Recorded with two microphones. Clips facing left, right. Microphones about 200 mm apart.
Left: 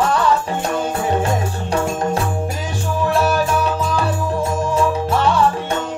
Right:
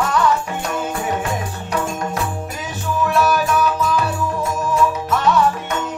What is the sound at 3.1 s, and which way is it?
Music, 30° left (ahead or behind).